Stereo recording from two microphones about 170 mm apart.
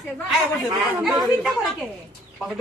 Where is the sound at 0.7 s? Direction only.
25° right (ahead or behind).